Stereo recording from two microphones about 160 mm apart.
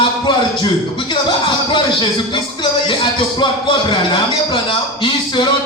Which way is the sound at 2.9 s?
30° left (ahead or behind).